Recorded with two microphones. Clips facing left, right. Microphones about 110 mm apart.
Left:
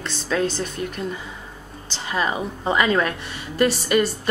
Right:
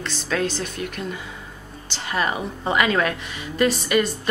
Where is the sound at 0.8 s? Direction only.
35° left (ahead or behind).